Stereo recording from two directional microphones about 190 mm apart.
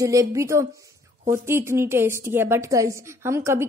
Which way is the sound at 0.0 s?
15° right (ahead or behind).